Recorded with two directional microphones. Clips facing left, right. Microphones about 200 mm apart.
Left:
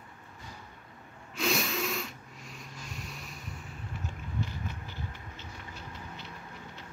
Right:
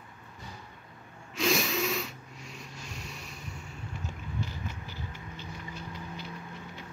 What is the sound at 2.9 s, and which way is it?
Vehicle, centre (ahead or behind).